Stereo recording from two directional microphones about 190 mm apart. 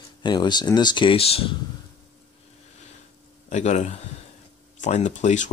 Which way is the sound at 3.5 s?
40° left (ahead or behind).